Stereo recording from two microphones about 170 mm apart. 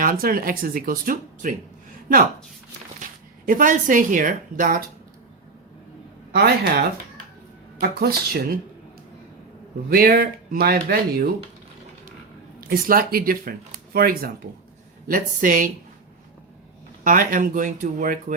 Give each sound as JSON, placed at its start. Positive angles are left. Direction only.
{"t": 0.0, "sound": "speech", "side_deg": -55}
{"t": 3.0, "sound": "speech", "side_deg": -50}
{"t": 6.3, "sound": "speech", "side_deg": -65}
{"t": 9.9, "sound": "speech", "side_deg": -60}
{"t": 12.5, "sound": "speech", "side_deg": -55}
{"t": 17.0, "sound": "speech", "side_deg": -50}